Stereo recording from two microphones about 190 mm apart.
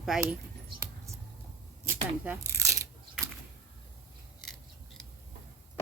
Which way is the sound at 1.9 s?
15° right (ahead or behind).